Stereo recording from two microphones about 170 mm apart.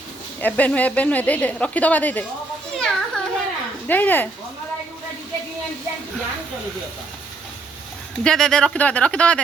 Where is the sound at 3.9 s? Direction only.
10° left (ahead or behind).